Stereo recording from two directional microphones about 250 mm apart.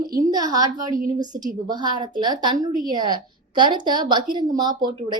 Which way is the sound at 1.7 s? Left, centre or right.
Centre.